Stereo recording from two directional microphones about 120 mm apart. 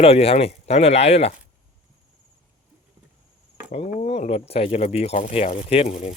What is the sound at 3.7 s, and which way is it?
Speech, 80° left.